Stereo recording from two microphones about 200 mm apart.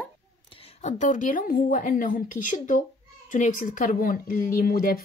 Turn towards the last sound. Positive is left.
turn(degrees=45)  # may be behind; listen again after turning